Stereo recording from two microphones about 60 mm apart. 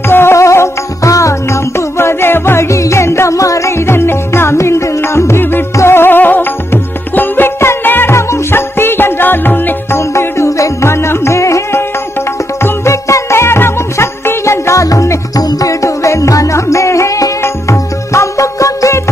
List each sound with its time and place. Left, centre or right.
0.1 s music: left
8.1 s music: left
9.9 s music: left